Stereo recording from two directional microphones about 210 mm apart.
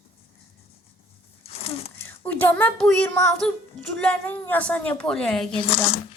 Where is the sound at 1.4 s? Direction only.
25° left (ahead or behind).